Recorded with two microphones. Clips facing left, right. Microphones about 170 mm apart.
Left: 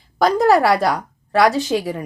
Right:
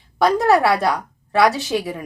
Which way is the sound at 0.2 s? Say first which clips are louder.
Left 1 dB; centre (ahead or behind).